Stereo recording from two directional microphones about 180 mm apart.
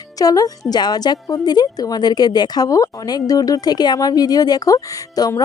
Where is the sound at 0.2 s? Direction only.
20° left (ahead or behind).